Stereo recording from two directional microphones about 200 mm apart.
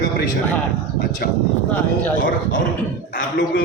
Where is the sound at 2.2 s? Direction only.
40° left (ahead or behind).